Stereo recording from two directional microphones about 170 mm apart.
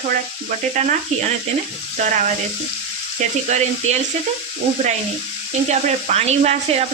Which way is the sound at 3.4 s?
40° right (ahead or behind).